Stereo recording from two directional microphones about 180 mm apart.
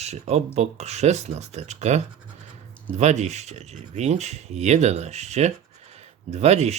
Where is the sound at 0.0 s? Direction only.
35° right (ahead or behind).